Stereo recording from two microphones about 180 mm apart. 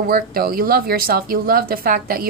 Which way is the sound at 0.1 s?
55° right (ahead or behind).